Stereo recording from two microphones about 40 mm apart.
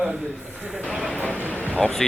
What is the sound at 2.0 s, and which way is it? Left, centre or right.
Speech, centre.